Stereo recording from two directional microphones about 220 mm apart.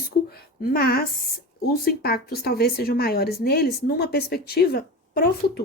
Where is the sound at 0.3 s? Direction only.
45° left (ahead or behind).